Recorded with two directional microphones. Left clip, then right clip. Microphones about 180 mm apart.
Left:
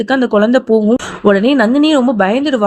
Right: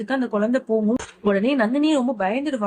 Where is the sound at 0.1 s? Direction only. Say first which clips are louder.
Left 10 dB; 35° left (ahead or behind).